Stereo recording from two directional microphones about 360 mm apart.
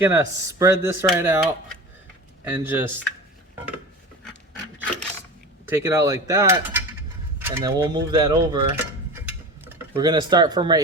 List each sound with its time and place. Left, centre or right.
0.0 s speech: centre
5.6 s speech: centre
7.3 s mechanisms: centre